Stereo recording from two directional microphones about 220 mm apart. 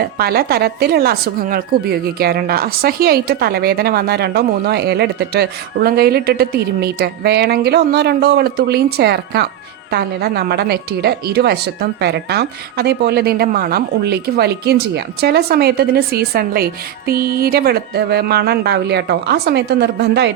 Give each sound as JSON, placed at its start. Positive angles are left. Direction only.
{"t": 0.2, "sound": "a woman's voice", "side_deg": -45}